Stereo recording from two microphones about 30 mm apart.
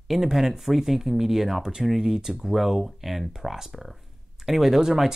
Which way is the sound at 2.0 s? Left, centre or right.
Right.